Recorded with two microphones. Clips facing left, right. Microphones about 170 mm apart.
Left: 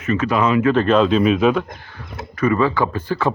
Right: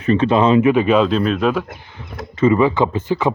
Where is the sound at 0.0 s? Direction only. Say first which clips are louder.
Right 4 dB; 30° right (ahead or behind).